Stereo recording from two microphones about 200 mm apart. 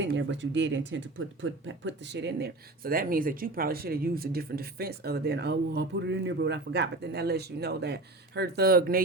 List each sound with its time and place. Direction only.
0.0 s speech: 65° right (ahead or behind)